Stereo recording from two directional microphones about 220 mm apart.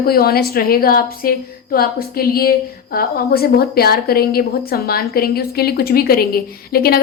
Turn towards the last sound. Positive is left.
turn(degrees=45)  # may be behind; listen again after turning